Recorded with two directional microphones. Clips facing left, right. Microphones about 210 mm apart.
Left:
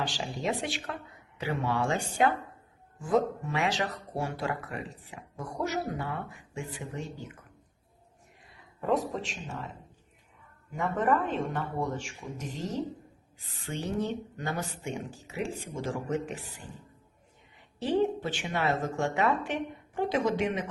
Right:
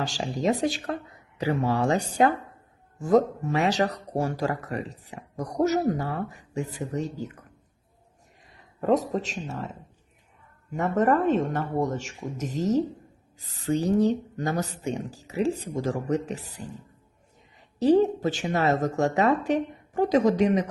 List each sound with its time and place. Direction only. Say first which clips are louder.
0.0 s speech: right 6 dB; 45° right (ahead or behind)
8.8 s speech: right 5 dB; 40° right (ahead or behind)
10.8 s speech: right 5 dB; 40° right (ahead or behind)
17.7 s speech: right 7 dB; 40° right (ahead or behind)